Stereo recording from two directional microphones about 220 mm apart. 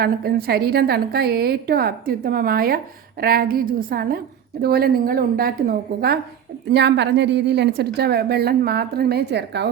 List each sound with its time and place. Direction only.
0.0 s a woman's voice: 45° right (ahead or behind)